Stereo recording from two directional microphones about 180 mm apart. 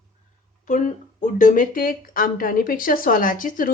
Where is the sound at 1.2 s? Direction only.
45° left (ahead or behind).